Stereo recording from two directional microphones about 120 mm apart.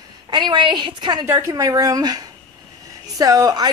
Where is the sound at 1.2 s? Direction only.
20° right (ahead or behind).